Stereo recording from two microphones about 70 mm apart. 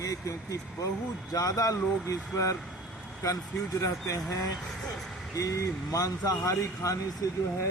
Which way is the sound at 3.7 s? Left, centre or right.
Left.